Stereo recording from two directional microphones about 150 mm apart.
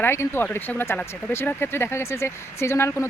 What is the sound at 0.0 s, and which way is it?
Speech, 15° left (ahead or behind).